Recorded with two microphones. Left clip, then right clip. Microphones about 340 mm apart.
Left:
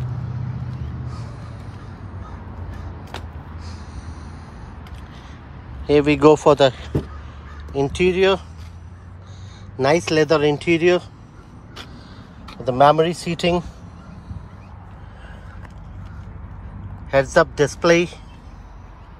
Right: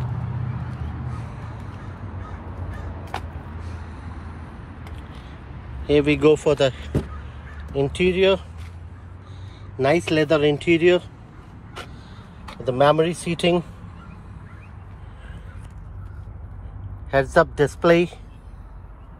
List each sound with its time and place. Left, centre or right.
5.9 s speech: centre
9.8 s speech: centre
12.7 s speech: centre
13.1 s speech: left
13.4 s speech: centre
17.1 s speech: centre